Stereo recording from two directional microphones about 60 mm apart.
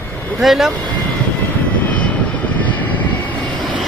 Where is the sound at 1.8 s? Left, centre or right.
Left.